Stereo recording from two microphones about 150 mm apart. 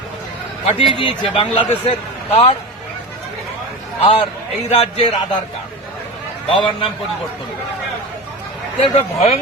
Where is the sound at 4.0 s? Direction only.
40° left (ahead or behind).